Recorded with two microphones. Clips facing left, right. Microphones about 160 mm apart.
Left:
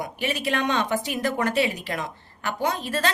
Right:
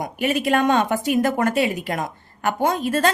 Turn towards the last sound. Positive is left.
turn(degrees=-45)  # may be behind; listen again after turning